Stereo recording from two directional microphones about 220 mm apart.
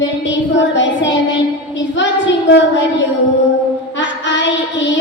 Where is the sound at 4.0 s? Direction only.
55° left (ahead or behind).